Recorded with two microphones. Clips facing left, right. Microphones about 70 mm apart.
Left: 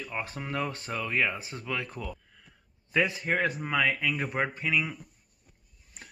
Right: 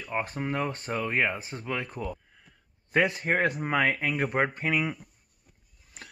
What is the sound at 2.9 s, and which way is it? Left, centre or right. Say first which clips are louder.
Speech: right 2 dB; right.